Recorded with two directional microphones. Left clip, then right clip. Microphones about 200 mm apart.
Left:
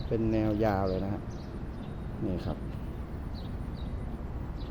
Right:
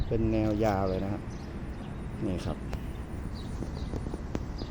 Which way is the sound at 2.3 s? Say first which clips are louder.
Right 1 dB; centre (ahead or behind).